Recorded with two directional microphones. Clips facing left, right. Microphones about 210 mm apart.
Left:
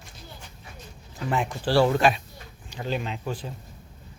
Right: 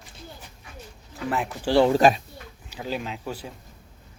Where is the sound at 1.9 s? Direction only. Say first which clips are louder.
Right 4 dB; 40° right (ahead or behind).